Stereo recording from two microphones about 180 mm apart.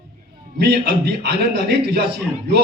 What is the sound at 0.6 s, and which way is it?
A man's voice, 65° right (ahead or behind).